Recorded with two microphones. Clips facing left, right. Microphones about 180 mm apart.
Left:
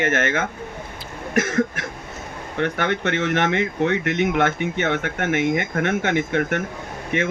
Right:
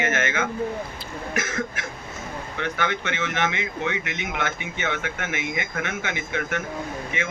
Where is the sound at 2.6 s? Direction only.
55° left (ahead or behind).